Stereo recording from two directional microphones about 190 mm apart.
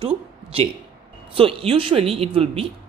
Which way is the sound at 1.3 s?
30° right (ahead or behind).